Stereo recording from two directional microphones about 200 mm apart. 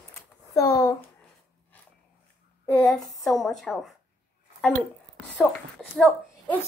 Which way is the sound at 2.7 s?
Centre (ahead or behind).